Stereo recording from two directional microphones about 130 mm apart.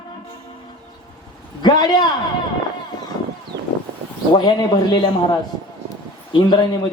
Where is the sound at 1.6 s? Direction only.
35° left (ahead or behind).